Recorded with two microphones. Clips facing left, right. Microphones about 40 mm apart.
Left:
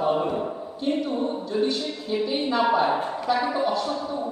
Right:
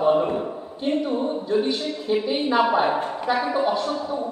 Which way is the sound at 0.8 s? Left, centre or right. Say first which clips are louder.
Right 2 dB; right.